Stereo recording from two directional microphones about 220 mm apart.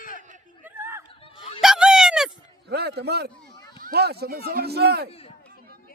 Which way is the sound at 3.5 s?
20° left (ahead or behind).